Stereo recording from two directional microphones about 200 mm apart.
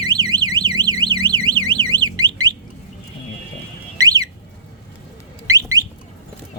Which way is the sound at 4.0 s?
20° right (ahead or behind).